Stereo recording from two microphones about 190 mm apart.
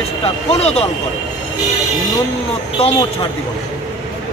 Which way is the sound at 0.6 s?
30° left (ahead or behind).